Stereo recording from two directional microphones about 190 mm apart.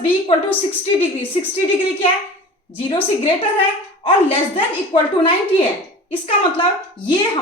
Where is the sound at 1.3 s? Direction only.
35° left (ahead or behind).